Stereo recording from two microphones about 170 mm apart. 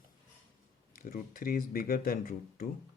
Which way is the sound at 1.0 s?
55° left (ahead or behind).